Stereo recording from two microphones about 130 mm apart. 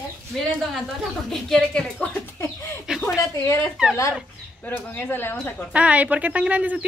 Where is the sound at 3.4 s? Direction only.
15° left (ahead or behind).